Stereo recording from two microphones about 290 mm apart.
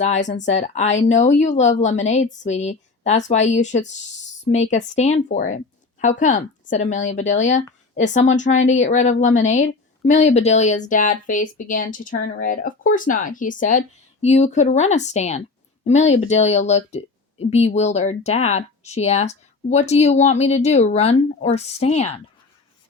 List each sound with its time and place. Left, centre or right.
0.0 s speech: left